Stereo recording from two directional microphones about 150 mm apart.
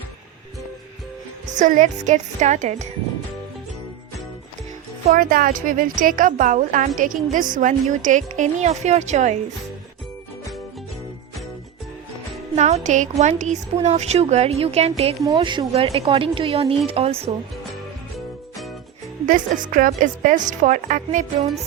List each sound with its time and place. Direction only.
1.5 s a woman's voice: 55° right (ahead or behind)
5.1 s a woman's voice: 70° right (ahead or behind); by 9.4 s 50° right (ahead or behind)
12.5 s a woman's voice: 50° right (ahead or behind)
19.2 s a woman's voice: 65° right (ahead or behind)